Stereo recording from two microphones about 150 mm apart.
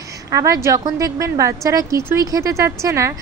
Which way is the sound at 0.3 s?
20° right (ahead or behind).